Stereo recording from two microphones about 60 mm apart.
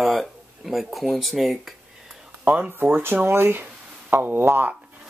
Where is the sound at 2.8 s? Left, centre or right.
Right.